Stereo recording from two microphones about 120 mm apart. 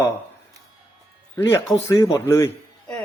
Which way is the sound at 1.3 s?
25° left (ahead or behind).